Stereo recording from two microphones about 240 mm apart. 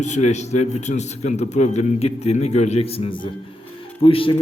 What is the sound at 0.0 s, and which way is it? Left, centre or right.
A man's voice, left.